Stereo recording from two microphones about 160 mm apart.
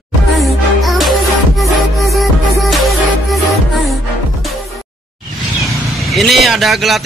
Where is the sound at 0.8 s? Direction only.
Centre (ahead or behind).